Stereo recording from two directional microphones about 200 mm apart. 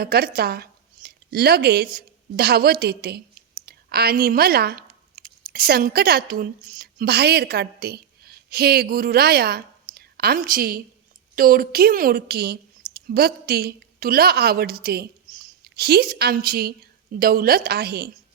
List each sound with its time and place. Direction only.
0.0 s a woman's voice: 50° right (ahead or behind)